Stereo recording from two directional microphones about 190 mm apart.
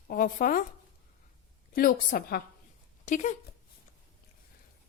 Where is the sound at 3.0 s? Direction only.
40° left (ahead or behind).